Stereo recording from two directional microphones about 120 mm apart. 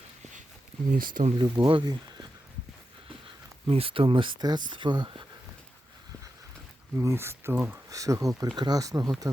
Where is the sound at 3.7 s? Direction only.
50° right (ahead or behind).